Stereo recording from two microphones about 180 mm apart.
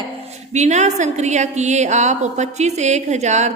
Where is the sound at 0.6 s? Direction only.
40° right (ahead or behind).